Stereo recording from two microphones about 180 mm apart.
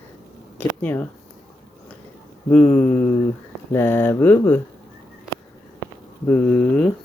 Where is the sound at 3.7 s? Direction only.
15° left (ahead or behind).